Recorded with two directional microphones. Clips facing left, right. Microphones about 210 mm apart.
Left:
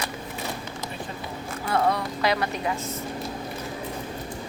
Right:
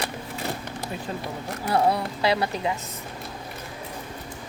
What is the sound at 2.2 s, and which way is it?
Speech, 30° right (ahead or behind).